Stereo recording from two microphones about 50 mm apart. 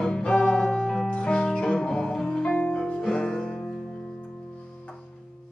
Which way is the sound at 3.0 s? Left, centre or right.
Centre.